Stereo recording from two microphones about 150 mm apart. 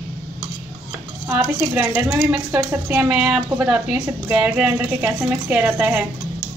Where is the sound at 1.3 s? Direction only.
10° right (ahead or behind).